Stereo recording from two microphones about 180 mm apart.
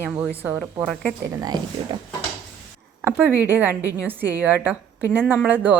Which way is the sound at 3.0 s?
10° right (ahead or behind).